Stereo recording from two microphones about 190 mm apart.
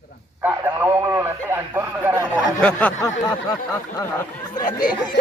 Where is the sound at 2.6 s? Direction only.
5° left (ahead or behind).